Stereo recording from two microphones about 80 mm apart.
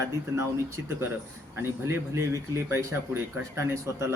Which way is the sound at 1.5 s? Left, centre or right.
Right.